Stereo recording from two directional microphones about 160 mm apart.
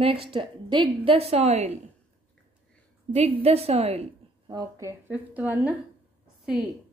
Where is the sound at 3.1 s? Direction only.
40° right (ahead or behind).